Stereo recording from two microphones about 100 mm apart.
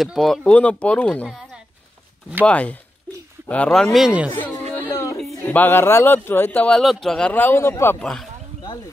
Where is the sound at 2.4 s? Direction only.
15° left (ahead or behind).